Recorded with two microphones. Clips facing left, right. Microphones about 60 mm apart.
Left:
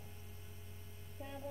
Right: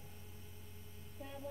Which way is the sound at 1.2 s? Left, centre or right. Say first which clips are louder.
Left 1 dB; centre.